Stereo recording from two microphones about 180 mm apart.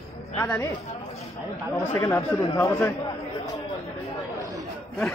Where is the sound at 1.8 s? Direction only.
15° left (ahead or behind).